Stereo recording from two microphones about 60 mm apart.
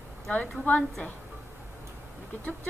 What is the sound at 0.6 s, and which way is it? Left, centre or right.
Speech, left.